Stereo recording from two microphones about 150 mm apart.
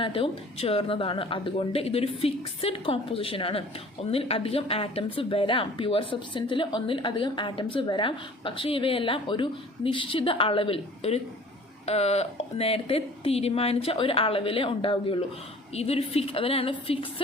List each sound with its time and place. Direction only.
0.0 s a woman's voice: 35° left (ahead or behind)